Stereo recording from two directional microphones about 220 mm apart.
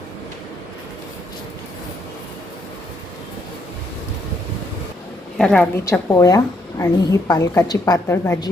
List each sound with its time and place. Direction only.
5.4 s a woman's voice: 5° left (ahead or behind)